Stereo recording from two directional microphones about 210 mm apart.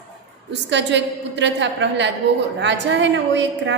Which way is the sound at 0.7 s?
55° right (ahead or behind).